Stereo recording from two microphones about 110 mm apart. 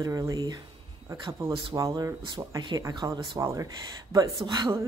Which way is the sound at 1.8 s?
30° right (ahead or behind).